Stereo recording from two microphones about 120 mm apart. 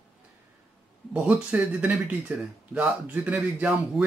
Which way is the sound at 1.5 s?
10° right (ahead or behind).